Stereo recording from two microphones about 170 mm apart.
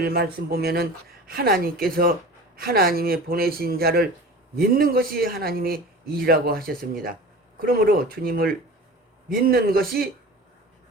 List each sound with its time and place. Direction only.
0.0 s speech: 65° right (ahead or behind)